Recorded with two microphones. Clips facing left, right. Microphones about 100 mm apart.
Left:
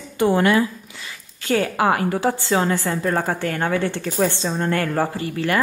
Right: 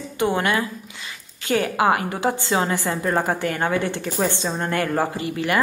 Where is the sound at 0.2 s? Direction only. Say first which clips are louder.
Left 4 dB; 20° right (ahead or behind).